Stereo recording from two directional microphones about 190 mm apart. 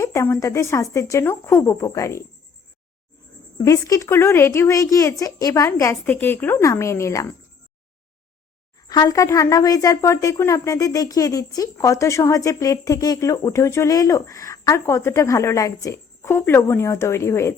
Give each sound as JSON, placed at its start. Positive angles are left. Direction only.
{"t": 0.0, "sound": "speech", "side_deg": 15}
{"t": 3.6, "sound": "speech", "side_deg": 20}
{"t": 8.9, "sound": "speech", "side_deg": 20}